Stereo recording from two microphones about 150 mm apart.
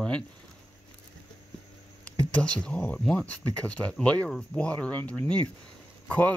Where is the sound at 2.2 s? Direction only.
5° left (ahead or behind).